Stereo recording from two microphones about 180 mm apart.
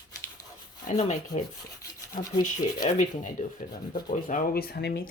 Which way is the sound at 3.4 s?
45° left (ahead or behind).